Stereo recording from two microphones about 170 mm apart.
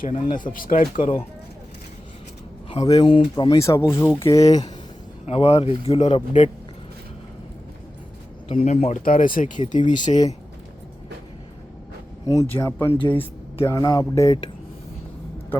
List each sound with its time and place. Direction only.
0.1 s speech: 45° left (ahead or behind)
2.6 s speech: 25° left (ahead or behind)
5.2 s speech: 35° left (ahead or behind)
8.5 s speech: 40° left (ahead or behind)
10.1 s speech: 35° left (ahead or behind)
12.3 s speech: 20° left (ahead or behind)
12.9 s speech: 30° left (ahead or behind)
13.1 s speech: 15° left (ahead or behind)